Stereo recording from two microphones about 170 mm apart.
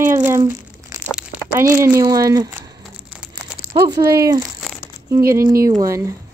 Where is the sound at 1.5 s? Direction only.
15° right (ahead or behind).